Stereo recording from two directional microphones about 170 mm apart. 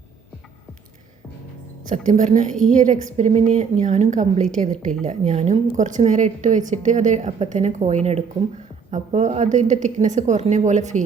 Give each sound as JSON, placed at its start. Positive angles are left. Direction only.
{"t": 1.9, "sound": "a woman's voice", "side_deg": -45}